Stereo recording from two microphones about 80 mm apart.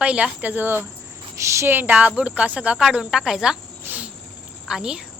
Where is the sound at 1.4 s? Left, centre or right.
Right; by 3.6 s centre.